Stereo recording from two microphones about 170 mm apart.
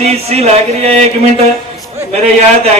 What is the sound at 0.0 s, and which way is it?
Speech, 40° right (ahead or behind).